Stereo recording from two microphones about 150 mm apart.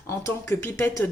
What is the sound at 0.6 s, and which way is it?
Speech, 15° left (ahead or behind).